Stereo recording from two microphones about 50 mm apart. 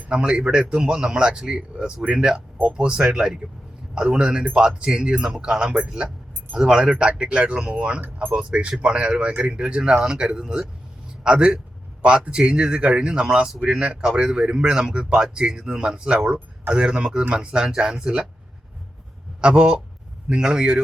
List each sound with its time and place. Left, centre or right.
0.1 s a man's voice: centre
19.4 s a man's voice: centre